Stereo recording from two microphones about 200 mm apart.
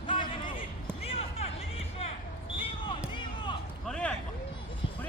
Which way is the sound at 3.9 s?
5° left (ahead or behind).